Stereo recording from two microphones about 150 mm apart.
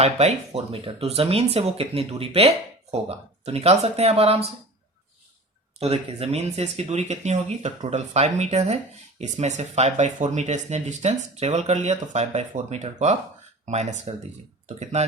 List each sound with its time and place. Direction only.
0.0 s speech: 45° right (ahead or behind)
5.8 s speech: 45° right (ahead or behind)